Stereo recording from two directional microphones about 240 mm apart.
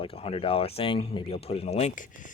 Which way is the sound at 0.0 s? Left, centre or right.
Left.